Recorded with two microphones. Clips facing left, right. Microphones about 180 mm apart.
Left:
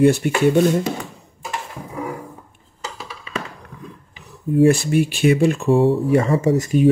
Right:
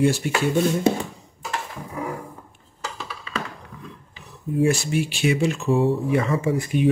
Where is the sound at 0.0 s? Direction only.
60° left (ahead or behind).